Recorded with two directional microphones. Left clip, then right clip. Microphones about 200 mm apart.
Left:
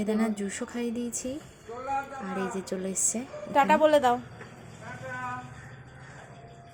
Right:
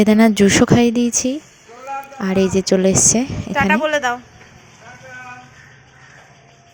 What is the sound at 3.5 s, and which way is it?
Speech, 15° left (ahead or behind).